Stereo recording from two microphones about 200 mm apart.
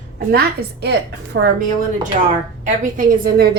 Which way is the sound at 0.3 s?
50° right (ahead or behind).